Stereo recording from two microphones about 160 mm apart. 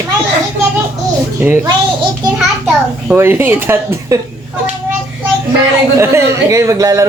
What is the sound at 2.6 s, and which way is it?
Speech, 15° right (ahead or behind).